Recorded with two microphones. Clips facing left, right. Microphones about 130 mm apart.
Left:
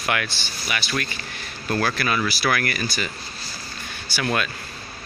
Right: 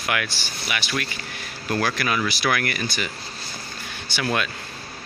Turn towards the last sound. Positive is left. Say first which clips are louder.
# even
turn(degrees=-20)  # may be behind; listen again after turning